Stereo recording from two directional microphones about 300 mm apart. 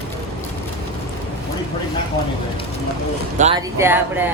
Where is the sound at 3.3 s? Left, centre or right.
Right.